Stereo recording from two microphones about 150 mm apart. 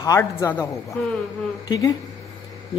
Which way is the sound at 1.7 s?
25° left (ahead or behind).